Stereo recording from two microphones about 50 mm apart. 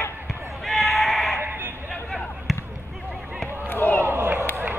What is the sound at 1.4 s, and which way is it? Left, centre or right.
Sheep, right.